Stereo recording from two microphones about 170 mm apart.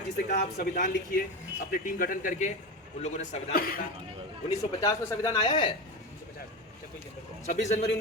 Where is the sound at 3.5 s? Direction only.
60° left (ahead or behind).